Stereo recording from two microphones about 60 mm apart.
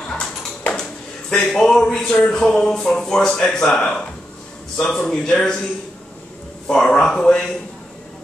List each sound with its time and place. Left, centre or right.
1.3 s a man's voice: centre
6.7 s a man's voice: centre